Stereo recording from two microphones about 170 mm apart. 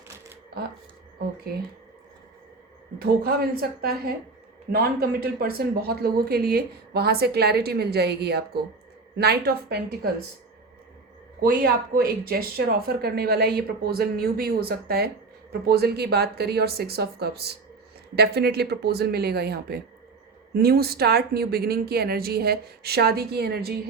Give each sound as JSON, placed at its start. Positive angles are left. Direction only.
{"t": 3.0, "sound": "speech", "side_deg": -65}
{"t": 11.3, "sound": "speech", "side_deg": -65}